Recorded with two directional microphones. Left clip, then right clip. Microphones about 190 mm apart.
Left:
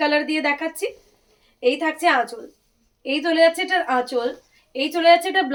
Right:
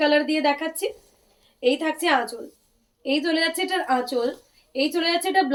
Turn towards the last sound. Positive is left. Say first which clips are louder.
# left 6 dB
turn(degrees=20)  # may be behind; listen again after turning